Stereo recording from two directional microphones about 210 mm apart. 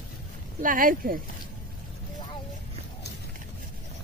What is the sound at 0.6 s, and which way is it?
Speech, 40° right (ahead or behind).